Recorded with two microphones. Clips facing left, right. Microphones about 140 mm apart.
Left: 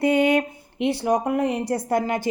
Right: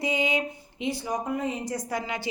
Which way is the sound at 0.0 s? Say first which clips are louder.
Left 8 dB; 60° left (ahead or behind).